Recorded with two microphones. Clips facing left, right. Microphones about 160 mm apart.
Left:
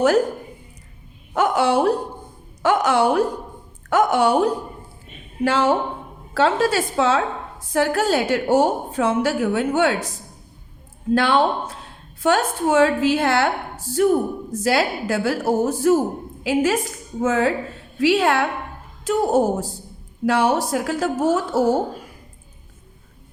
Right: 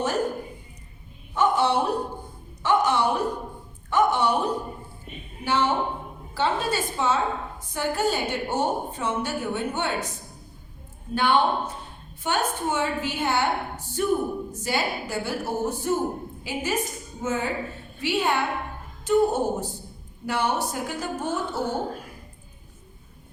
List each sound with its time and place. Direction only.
1.3 s a woman's voice: 85° left
11.1 s a woman's voice: 90° left